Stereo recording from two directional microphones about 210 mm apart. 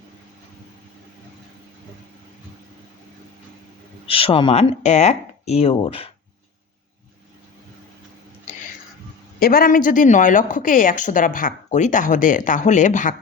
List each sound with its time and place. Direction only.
4.0 s speech: 25° left (ahead or behind)
9.4 s a woman's voice: 45° left (ahead or behind)